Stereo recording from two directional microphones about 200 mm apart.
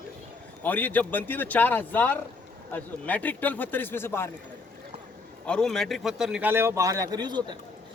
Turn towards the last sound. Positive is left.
turn(degrees=-20)  # may be behind; listen again after turning